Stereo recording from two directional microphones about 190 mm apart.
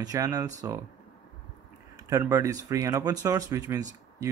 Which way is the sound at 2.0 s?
15° right (ahead or behind).